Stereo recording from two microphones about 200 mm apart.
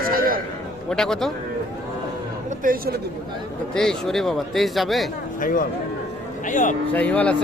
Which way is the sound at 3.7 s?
Centre (ahead or behind).